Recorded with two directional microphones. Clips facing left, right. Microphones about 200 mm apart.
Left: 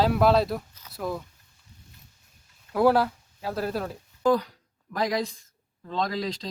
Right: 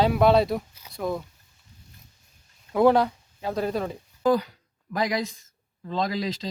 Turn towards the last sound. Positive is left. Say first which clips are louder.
# right 1 dB
turn(degrees=0)  # may be behind; listen again after turning